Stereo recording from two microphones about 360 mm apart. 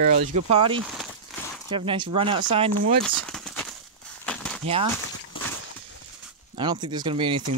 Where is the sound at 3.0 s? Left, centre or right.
Centre.